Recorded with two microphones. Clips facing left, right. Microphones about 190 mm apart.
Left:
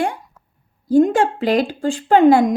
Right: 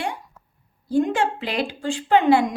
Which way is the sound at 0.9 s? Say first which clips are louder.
Left 7 dB; 45° left (ahead or behind).